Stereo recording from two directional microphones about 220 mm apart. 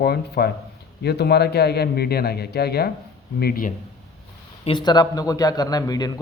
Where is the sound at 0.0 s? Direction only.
45° left (ahead or behind).